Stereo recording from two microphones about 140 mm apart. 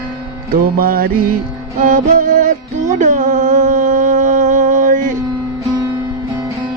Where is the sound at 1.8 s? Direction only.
70° right (ahead or behind).